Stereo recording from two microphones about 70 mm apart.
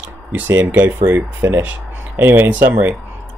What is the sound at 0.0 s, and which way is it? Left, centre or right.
Speech, right.